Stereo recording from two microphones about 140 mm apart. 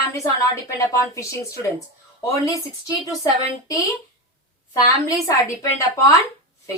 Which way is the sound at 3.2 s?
25° left (ahead or behind).